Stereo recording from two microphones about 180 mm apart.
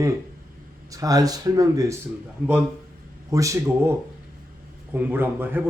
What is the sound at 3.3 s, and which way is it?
A man's voice, 20° right (ahead or behind).